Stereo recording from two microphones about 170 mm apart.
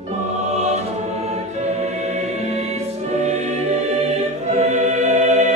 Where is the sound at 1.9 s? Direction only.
40° right (ahead or behind).